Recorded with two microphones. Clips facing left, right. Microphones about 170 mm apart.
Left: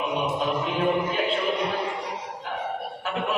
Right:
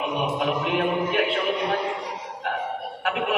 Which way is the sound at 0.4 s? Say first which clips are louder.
Right 2 dB; 65° right (ahead or behind).